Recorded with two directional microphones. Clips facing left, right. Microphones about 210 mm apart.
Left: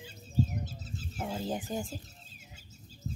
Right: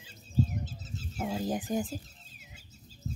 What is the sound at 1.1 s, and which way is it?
Speech, 10° right (ahead or behind).